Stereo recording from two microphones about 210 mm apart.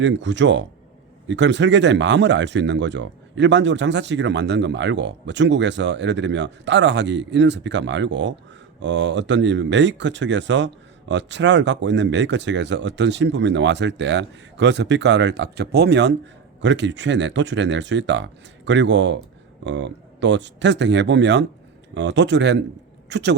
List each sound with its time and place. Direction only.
0.0 s speech: 60° right (ahead or behind)